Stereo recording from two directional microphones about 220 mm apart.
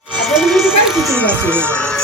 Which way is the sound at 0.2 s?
Centre (ahead or behind).